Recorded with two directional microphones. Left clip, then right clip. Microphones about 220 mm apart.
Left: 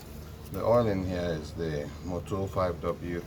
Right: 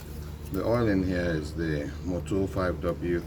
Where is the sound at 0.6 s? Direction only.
25° left (ahead or behind).